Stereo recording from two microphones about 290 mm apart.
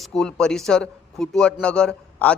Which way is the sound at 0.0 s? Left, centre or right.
Centre.